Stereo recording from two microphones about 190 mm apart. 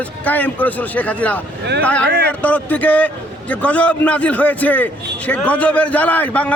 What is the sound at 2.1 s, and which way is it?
Speech, 55° right (ahead or behind).